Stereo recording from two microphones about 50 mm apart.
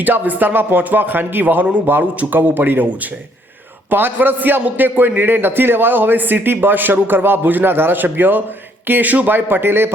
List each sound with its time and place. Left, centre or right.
0.0 s a man's voice: right
3.8 s a man's voice: right